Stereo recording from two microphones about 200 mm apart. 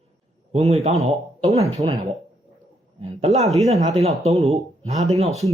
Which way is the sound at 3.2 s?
30° right (ahead or behind).